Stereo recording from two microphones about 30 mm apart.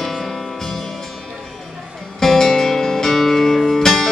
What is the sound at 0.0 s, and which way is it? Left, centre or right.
Music, centre.